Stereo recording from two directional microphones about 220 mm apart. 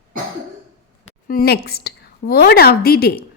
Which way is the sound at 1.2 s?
45° left (ahead or behind).